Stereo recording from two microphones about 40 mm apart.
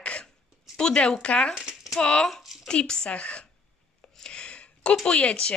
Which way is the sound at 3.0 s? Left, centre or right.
Left.